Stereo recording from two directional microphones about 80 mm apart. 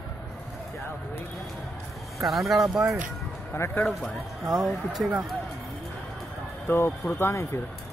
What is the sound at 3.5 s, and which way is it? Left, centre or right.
Speech, left.